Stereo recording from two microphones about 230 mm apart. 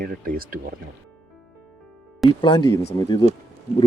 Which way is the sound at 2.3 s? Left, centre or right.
Centre.